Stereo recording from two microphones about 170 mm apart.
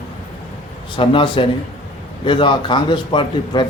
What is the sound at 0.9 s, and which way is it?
Speech, 30° left (ahead or behind).